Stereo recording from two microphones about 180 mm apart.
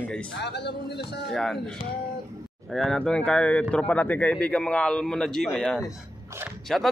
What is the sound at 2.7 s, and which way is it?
A man's voice, 5° left (ahead or behind).